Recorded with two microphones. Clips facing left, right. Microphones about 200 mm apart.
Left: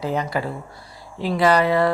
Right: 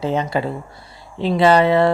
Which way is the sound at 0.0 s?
25° right (ahead or behind).